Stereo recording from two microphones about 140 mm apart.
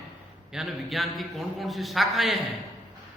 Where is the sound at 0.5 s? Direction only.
Centre (ahead or behind).